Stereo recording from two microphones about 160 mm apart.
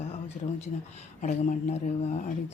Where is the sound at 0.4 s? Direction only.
50° left (ahead or behind).